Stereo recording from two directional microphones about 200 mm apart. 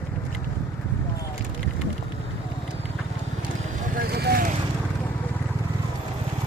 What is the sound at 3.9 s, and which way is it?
Vehicle, 50° right (ahead or behind).